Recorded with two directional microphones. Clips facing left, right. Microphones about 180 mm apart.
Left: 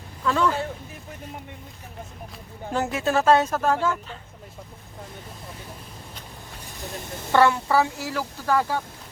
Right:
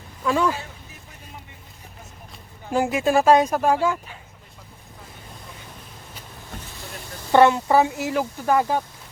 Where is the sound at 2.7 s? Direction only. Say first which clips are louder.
Right 4 dB; 10° right (ahead or behind).